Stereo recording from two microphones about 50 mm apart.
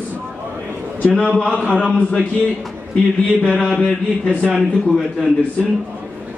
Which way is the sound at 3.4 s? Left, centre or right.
Centre.